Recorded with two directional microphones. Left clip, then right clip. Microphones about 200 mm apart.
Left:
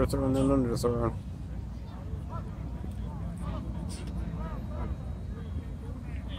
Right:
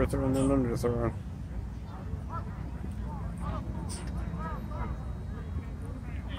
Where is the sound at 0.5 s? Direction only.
10° left (ahead or behind).